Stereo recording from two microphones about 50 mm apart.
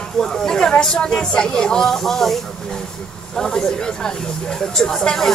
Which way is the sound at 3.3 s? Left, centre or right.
Centre.